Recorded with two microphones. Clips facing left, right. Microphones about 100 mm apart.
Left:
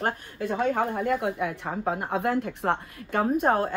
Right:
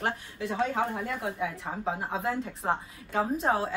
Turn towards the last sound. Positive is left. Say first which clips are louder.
# left 4 dB
turn(degrees=55)  # may be behind; listen again after turning